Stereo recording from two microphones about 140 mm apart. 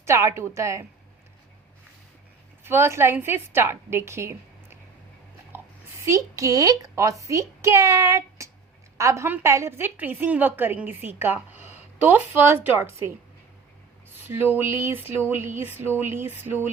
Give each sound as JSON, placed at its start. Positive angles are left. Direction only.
{"t": 0.0, "sound": "a child's voice", "side_deg": -20}
{"t": 2.6, "sound": "a woman's voice", "side_deg": -15}
{"t": 5.5, "sound": "a sound", "side_deg": -15}
{"t": 6.0, "sound": "a child's voice", "side_deg": -20}
{"t": 14.3, "sound": "a woman's voice", "side_deg": -15}